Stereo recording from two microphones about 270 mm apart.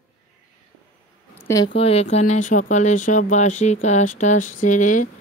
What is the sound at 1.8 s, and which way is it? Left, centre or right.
Speech, left.